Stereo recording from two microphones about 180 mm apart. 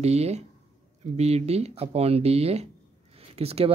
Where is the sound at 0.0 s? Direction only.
35° right (ahead or behind).